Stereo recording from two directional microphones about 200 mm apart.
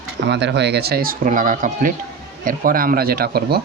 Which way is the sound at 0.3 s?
60° right (ahead or behind).